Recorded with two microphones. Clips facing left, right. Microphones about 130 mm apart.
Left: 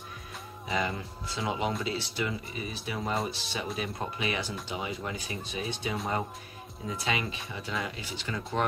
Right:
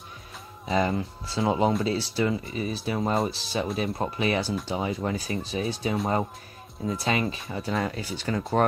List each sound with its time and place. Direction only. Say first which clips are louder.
0.7 s speech: right 7 dB; 35° right (ahead or behind)